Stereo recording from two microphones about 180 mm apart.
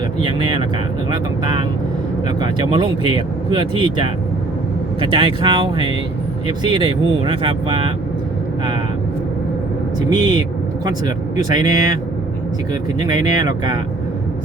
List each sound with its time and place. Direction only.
0.2 s speech: 25° right (ahead or behind)
10.1 s speech: 25° right (ahead or behind)
13.1 s speech: 20° right (ahead or behind)